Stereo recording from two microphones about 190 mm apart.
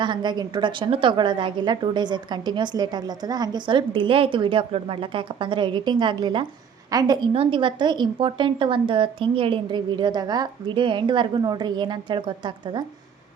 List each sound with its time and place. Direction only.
0.0 s a woman's voice: 25° right (ahead or behind)